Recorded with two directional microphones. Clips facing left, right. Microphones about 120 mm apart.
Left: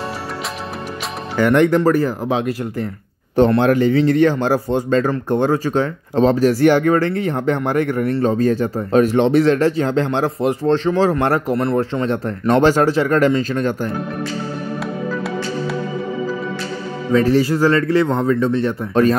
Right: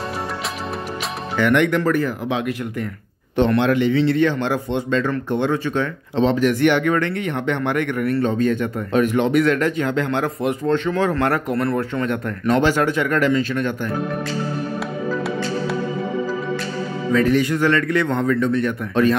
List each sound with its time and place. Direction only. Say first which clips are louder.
1.4 s speech: left 4 dB; 35° left (ahead or behind)
12.4 s speech: left 4 dB; 40° left (ahead or behind)
17.1 s speech: left 3 dB; 35° left (ahead or behind)